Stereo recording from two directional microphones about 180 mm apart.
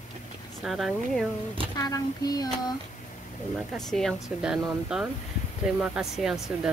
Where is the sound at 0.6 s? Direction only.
Centre (ahead or behind).